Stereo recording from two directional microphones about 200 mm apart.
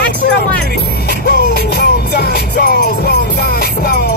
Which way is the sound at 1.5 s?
50° left (ahead or behind).